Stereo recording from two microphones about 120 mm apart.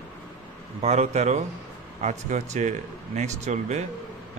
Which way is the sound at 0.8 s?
70° right (ahead or behind).